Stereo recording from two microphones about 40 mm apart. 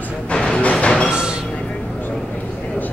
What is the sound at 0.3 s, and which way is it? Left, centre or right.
Music, left.